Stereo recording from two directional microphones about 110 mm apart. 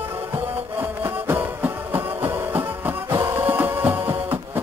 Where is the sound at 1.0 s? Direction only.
20° right (ahead or behind).